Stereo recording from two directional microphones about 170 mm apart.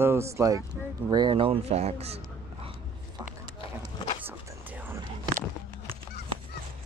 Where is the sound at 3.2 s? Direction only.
25° right (ahead or behind).